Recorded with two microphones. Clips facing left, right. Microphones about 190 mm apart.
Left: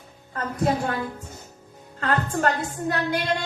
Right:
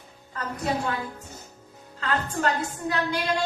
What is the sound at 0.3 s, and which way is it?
Speech, 50° left (ahead or behind).